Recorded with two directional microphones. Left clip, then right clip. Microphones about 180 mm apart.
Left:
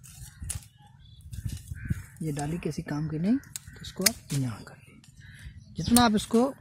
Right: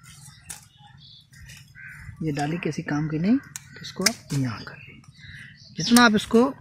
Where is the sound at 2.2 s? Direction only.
50° left (ahead or behind).